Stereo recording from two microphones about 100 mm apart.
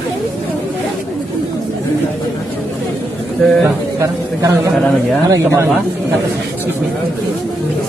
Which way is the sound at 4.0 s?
35° right (ahead or behind).